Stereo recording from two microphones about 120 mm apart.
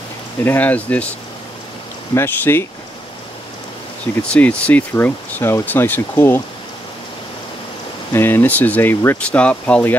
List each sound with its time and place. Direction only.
0.4 s speech: 15° left (ahead or behind)
2.1 s speech: 15° left (ahead or behind)
4.3 s speech: 10° left (ahead or behind)
8.1 s speech: 20° left (ahead or behind)